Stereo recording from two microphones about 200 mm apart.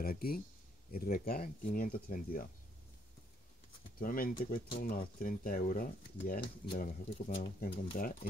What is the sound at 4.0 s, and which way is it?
Speech, 45° left (ahead or behind).